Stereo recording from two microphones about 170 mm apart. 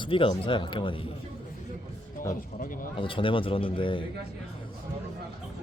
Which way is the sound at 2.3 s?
55° left (ahead or behind).